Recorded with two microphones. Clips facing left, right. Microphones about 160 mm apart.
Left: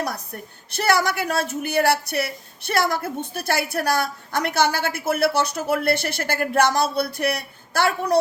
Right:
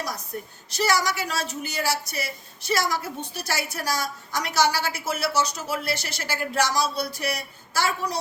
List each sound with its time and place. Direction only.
0.7 s speech: 55° left (ahead or behind)